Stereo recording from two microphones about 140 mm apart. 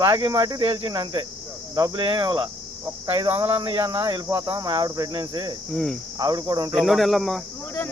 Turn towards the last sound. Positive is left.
turn(degrees=0)  # may be behind; listen again after turning